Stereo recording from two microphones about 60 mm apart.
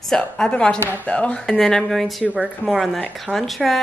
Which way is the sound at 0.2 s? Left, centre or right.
Centre.